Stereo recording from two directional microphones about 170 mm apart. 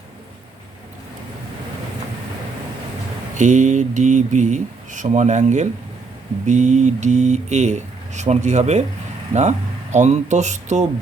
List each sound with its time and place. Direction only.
3.3 s speech: 45° right (ahead or behind)